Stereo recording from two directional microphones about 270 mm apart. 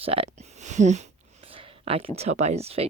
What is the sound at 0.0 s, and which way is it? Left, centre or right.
Whispering, right.